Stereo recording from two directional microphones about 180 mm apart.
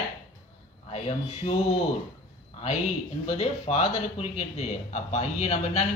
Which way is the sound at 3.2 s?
35° left (ahead or behind).